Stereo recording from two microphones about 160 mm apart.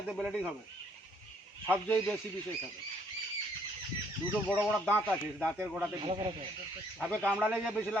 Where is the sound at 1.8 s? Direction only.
10° left (ahead or behind).